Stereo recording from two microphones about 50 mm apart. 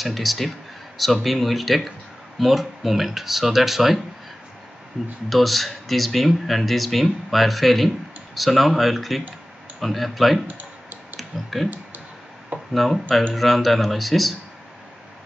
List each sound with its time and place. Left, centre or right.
0.0 s speech: centre
5.3 s speech: centre
10.4 s computer keyboard: right
11.1 s speech: centre
12.7 s speech: centre